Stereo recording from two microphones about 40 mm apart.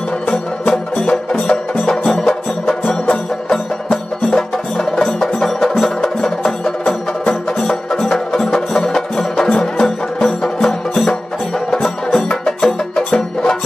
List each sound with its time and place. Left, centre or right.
0.7 s music: left
4.3 s music: centre